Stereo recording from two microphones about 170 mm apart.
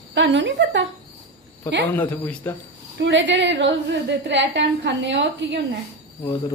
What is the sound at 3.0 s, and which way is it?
A woman's voice, 90° right.